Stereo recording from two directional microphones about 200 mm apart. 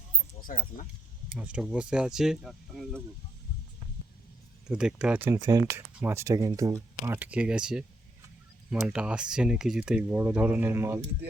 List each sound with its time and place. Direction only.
0.4 s speech: 40° left (ahead or behind)
1.4 s speech: 5° right (ahead or behind)
4.7 s speech: 5° right (ahead or behind)